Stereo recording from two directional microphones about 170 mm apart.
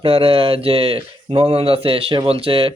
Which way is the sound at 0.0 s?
35° right (ahead or behind).